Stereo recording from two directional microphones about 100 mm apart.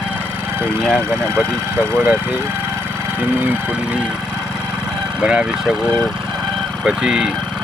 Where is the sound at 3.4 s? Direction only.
20° right (ahead or behind).